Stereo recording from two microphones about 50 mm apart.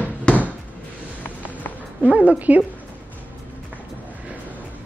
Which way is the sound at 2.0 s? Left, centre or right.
Right.